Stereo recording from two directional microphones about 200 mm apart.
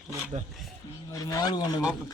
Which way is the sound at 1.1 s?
15° left (ahead or behind).